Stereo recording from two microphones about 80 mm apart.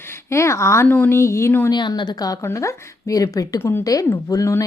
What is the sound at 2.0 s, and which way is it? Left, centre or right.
Speech, left.